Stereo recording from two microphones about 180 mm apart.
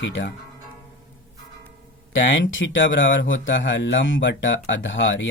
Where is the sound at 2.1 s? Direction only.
90° left.